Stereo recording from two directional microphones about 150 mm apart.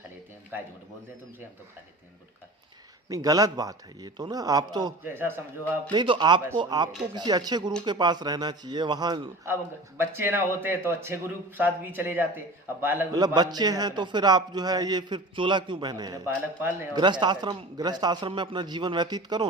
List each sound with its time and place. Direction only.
0.5 s speech: 10° right (ahead or behind)
3.1 s a man's voice: 25° right (ahead or behind)
5.0 s speech: 15° right (ahead or behind)
5.9 s a man's voice: 30° right (ahead or behind)
10.0 s speech: 15° right (ahead or behind)
13.1 s a man's voice: 25° right (ahead or behind)
16.9 s a man's voice: 30° right (ahead or behind)